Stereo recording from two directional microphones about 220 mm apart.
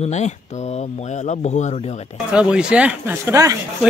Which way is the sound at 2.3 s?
5° right (ahead or behind).